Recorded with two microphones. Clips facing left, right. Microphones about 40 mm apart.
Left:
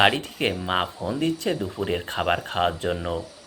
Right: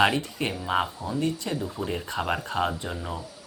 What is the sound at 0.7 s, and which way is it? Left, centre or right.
Speech, left.